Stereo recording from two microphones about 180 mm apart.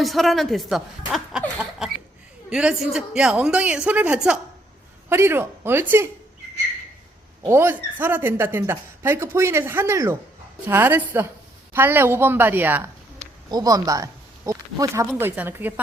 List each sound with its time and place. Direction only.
0.0 s a woman's voice: centre (ahead or behind)
7.4 s speech: 15° right (ahead or behind)
13.5 s speech: 20° right (ahead or behind)